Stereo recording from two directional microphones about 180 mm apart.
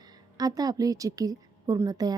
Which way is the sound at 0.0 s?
20° right (ahead or behind).